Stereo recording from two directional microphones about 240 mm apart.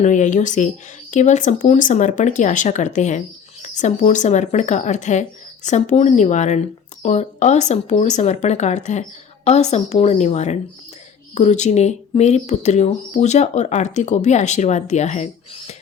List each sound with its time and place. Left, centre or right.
0.0 s speech: left